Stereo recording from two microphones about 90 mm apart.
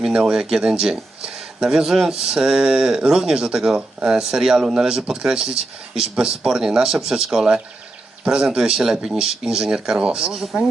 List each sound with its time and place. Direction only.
0.0 s speech: 10° right (ahead or behind)